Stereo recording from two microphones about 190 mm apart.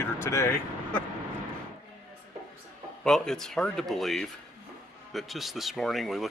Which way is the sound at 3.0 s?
5° left (ahead or behind).